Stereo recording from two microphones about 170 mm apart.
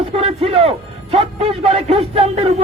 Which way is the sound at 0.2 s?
35° right (ahead or behind).